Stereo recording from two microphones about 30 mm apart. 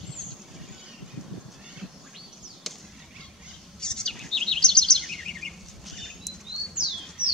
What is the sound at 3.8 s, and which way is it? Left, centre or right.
Chirp, left.